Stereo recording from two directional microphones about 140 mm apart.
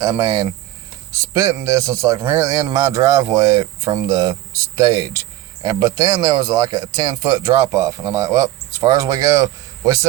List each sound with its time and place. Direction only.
0.0 s speech: 30° right (ahead or behind)